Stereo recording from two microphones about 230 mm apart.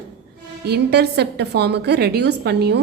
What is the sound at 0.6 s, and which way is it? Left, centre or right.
A woman's voice, right.